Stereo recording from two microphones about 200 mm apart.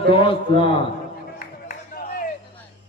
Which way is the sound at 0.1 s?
25° left (ahead or behind).